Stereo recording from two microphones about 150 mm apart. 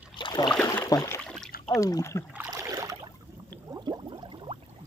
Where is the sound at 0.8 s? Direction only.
20° left (ahead or behind).